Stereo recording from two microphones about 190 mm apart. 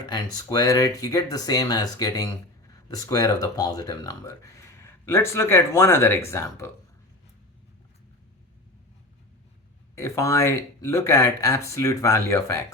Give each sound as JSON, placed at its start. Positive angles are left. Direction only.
{"t": 0.0, "sound": "speech", "side_deg": 20}
{"t": 9.9, "sound": "speech", "side_deg": 15}